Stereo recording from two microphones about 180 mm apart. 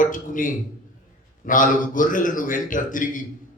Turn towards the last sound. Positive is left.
turn(degrees=50)  # may be behind; listen again after turning